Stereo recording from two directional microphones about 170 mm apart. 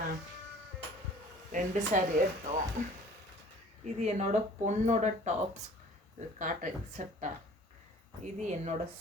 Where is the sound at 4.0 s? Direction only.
45° right (ahead or behind).